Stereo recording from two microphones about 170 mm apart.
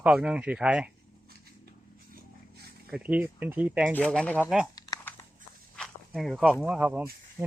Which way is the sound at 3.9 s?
5° left (ahead or behind).